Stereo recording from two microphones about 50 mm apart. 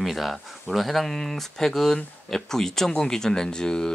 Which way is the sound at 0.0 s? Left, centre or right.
Centre.